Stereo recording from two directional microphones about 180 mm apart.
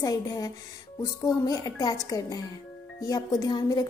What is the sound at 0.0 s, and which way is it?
A woman's voice, 20° left (ahead or behind).